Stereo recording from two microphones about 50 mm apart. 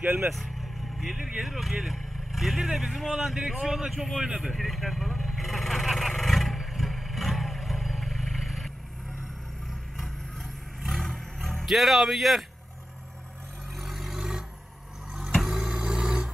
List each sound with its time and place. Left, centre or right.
0.3 s a man's voice: centre
4.4 s vehicle: centre
10.8 s vehicle: centre
13.7 s vehicle: centre
15.4 s a sound: centre
15.7 s vehicle: centre